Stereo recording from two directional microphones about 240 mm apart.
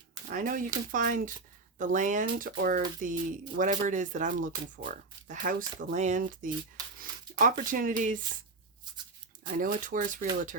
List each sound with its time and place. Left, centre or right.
0.3 s speech: right
9.6 s speech: right